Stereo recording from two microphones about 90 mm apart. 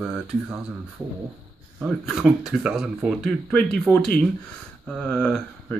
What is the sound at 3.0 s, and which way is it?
Speech, 5° left (ahead or behind).